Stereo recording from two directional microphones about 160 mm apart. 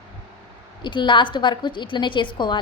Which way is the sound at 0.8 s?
30° left (ahead or behind).